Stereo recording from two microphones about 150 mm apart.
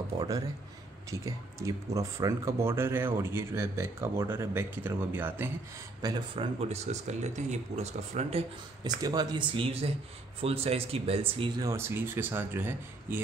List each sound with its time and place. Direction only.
0.1 s speech: 25° right (ahead or behind)
6.0 s speech: 30° right (ahead or behind)
8.8 s speech: 25° right (ahead or behind)